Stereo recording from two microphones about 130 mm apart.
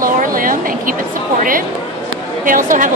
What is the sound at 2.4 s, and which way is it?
Speech, 90° right.